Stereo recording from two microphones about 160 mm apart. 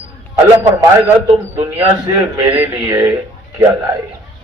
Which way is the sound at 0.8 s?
20° right (ahead or behind).